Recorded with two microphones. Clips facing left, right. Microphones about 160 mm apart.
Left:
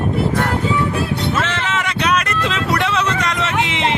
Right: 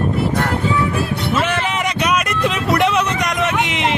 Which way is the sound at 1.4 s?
15° right (ahead or behind).